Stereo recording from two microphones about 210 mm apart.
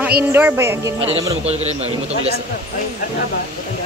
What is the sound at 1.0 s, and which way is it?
A man's voice, 30° right (ahead or behind).